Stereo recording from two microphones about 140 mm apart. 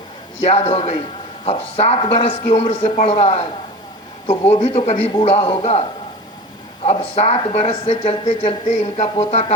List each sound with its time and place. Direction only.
0.4 s speech: 50° left (ahead or behind)
6.8 s speech: 50° left (ahead or behind)